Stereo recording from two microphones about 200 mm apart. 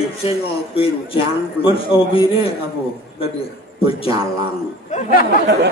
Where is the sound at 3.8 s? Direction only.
30° left (ahead or behind).